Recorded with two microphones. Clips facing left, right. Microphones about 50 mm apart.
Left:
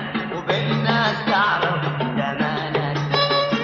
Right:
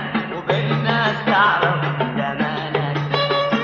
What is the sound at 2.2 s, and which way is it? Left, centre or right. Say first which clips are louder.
Music: right 1 dB; centre.